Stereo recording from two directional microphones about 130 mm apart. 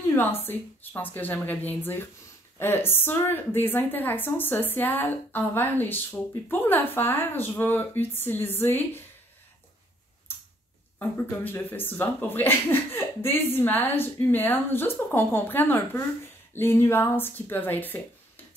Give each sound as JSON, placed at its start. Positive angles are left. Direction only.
{"t": 0.1, "sound": "speech", "side_deg": 15}
{"t": 11.0, "sound": "speech", "side_deg": 15}